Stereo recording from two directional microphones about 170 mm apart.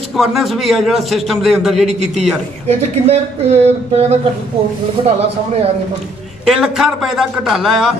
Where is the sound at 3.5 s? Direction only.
40° right (ahead or behind).